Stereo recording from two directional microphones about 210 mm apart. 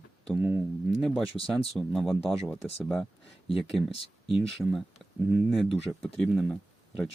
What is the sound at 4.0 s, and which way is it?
Speech, 25° left (ahead or behind).